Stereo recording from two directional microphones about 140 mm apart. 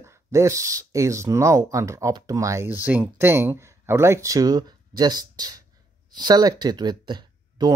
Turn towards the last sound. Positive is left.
turn(degrees=-30)  # may be behind; listen again after turning